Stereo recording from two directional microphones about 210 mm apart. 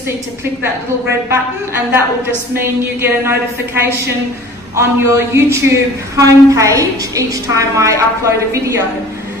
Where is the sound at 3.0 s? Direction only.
10° right (ahead or behind).